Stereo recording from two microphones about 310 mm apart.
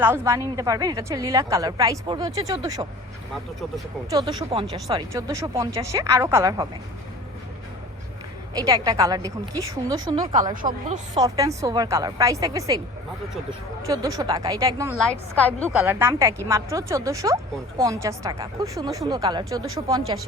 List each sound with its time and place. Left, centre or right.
0.0 s speech: centre
4.1 s speech: centre
8.5 s speech: centre
10.5 s speech: right
13.8 s speech: centre